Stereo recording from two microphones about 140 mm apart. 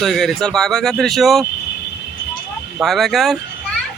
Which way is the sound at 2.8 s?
Centre (ahead or behind).